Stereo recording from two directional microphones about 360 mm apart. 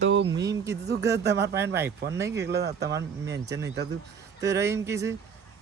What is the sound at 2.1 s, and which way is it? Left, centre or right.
Speech, centre.